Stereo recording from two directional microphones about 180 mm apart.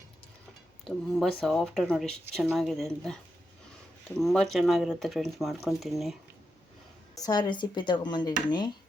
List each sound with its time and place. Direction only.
0.9 s speech: centre (ahead or behind)
4.2 s speech: centre (ahead or behind)
7.2 s speech: 20° left (ahead or behind)